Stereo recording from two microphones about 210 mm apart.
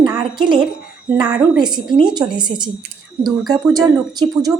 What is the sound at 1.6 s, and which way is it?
A woman's voice, 20° right (ahead or behind).